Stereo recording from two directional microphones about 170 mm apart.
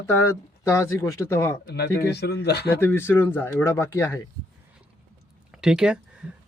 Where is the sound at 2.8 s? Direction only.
10° left (ahead or behind).